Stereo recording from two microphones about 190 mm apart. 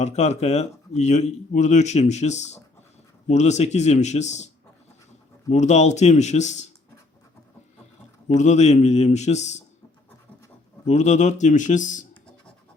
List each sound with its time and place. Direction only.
0.0 s speech: 35° left (ahead or behind)
5.5 s speech: 35° left (ahead or behind)
8.3 s speech: 35° left (ahead or behind)
10.8 s speech: 35° left (ahead or behind)